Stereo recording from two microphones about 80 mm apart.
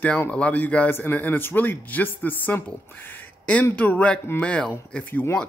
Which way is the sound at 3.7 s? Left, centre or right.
Centre.